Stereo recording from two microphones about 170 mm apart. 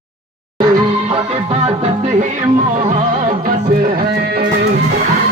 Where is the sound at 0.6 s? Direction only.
35° right (ahead or behind).